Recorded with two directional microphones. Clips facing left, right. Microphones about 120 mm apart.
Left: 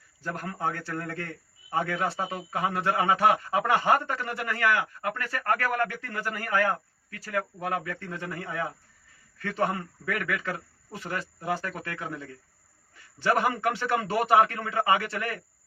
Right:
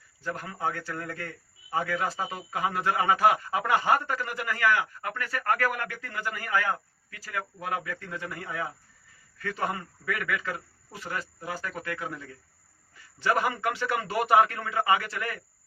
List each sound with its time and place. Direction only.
0.2 s a man's voice: 40° left (ahead or behind)
6.3 s speech: 40° left (ahead or behind)
10.1 s speech: 40° left (ahead or behind)
13.3 s speech: 35° left (ahead or behind)